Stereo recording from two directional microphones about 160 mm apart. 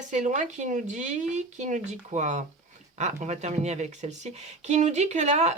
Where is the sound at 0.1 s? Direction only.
50° right (ahead or behind).